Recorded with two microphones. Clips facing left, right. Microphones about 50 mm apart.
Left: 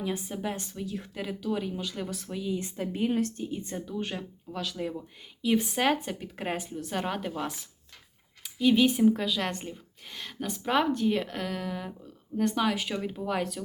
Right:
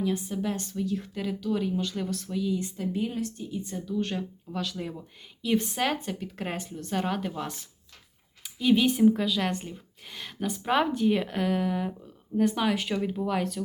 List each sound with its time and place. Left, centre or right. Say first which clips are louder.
0.0 s speech: right 3 dB; centre
3.9 s speech: right 7 dB; centre